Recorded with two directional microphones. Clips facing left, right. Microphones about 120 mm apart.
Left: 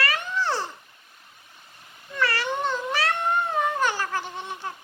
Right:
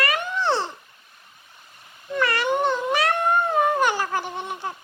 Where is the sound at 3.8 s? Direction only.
15° right (ahead or behind).